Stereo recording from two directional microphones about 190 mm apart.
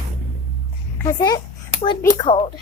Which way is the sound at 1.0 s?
20° left (ahead or behind).